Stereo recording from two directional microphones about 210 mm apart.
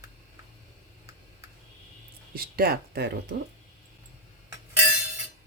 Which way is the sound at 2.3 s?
45° right (ahead or behind).